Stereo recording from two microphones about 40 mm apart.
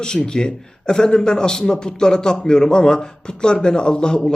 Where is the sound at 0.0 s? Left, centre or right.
Centre.